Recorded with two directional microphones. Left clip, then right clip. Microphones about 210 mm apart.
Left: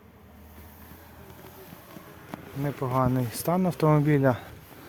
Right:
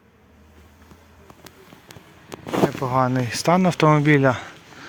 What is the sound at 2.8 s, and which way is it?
Speech, 10° right (ahead or behind).